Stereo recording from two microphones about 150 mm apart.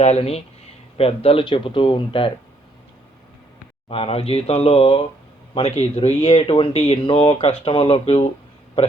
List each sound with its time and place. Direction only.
0.0 s speech: 45° left (ahead or behind)
3.8 s speech: 40° left (ahead or behind)